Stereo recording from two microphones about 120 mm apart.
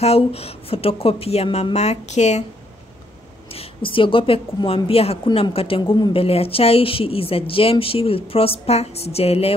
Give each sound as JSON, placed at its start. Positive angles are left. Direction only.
{"t": 0.0, "sound": "speech", "side_deg": 60}
{"t": 3.4, "sound": "speech", "side_deg": 55}
{"t": 5.8, "sound": "speech", "side_deg": 35}
{"t": 6.1, "sound": "speech", "side_deg": 55}